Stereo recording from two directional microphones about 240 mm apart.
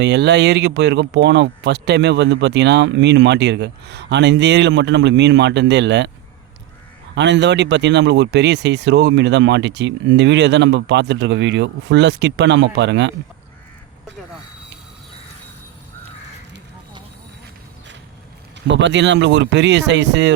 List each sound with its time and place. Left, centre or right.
0.0 s speech: right
7.2 s speech: right
18.7 s speech: right